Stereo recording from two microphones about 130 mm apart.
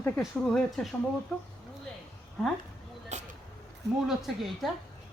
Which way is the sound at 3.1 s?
60° right (ahead or behind).